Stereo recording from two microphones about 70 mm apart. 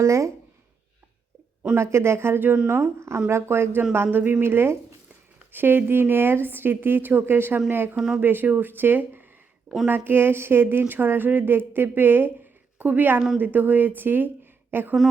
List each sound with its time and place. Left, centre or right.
0.0 s speech: right
1.7 s speech: right
7.9 s speech: centre
8.2 s a woman's voice: right